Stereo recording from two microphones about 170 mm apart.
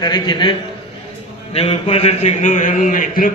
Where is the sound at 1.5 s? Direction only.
30° left (ahead or behind); by 3.3 s 55° left (ahead or behind).